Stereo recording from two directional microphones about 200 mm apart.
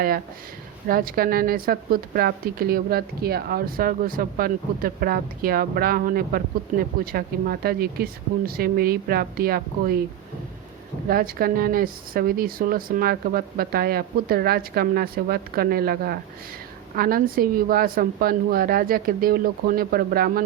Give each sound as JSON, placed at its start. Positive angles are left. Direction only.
{"t": 0.9, "sound": "a woman's voice", "side_deg": -45}
{"t": 11.1, "sound": "a woman's voice", "side_deg": -45}